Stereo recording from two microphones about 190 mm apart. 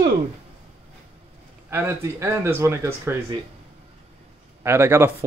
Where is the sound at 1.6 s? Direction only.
15° right (ahead or behind).